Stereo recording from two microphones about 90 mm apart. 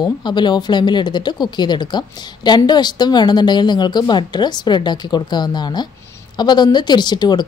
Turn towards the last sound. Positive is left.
turn(degrees=55)  # may be behind; listen again after turning